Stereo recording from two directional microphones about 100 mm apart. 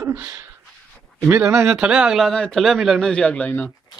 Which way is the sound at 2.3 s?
5° left (ahead or behind).